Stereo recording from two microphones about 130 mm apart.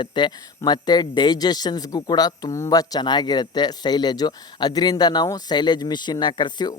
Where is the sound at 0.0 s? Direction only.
35° left (ahead or behind).